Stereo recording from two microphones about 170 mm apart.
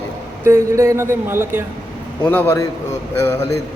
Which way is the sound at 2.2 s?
10° left (ahead or behind).